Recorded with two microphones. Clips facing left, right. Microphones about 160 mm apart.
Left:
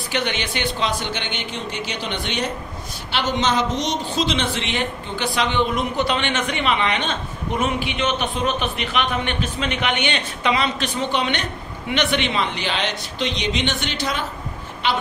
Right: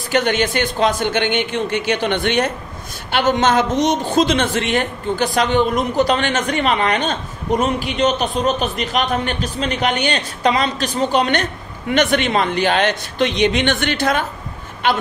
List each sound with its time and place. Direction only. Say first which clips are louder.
0.1 s a woman's voice: right 8 dB; 45° right (ahead or behind)